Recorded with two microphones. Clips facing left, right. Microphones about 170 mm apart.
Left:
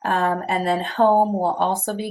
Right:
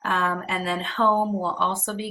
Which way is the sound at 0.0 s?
45° left (ahead or behind).